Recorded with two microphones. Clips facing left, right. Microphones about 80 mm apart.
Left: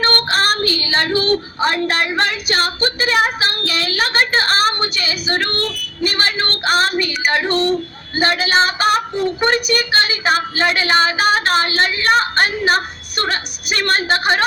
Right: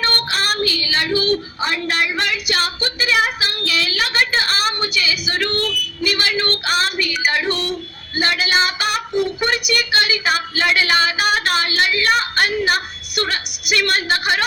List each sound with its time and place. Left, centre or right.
0.0 s child singing: left